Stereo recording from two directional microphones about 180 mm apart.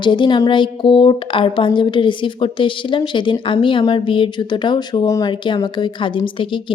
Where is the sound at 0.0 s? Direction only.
25° left (ahead or behind).